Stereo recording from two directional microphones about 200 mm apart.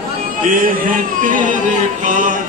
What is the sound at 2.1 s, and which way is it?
Music, 40° right (ahead or behind).